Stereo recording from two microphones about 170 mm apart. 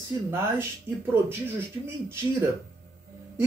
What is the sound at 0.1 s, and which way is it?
Speech, 15° right (ahead or behind).